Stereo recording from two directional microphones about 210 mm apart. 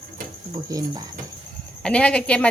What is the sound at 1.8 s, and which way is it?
Speech, 5° left (ahead or behind).